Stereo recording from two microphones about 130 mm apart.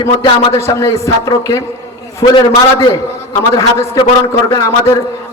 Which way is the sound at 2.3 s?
40° left (ahead or behind).